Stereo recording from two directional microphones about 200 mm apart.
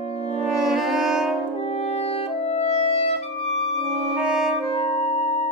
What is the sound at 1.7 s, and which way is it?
Music, 30° left (ahead or behind).